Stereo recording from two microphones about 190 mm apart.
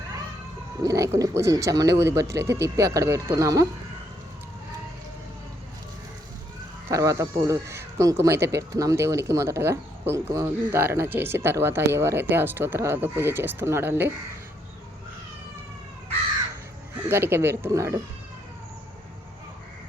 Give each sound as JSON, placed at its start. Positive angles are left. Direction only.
{"t": 0.8, "sound": "speech", "side_deg": -15}
{"t": 6.9, "sound": "speech", "side_deg": -15}
{"t": 17.1, "sound": "speech", "side_deg": -10}